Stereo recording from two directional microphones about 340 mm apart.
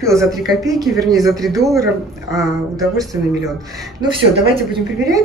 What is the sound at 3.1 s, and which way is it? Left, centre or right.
Speech, centre.